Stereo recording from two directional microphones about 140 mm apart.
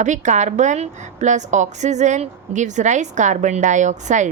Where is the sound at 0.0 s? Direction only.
60° right (ahead or behind).